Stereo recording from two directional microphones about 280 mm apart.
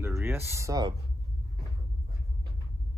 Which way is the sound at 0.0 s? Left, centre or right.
Centre.